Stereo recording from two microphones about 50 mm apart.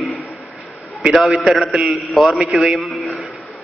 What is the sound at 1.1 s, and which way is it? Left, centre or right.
A man's voice, centre.